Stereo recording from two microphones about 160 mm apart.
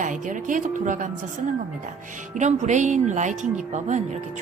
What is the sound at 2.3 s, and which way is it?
A woman's voice, 50° right (ahead or behind).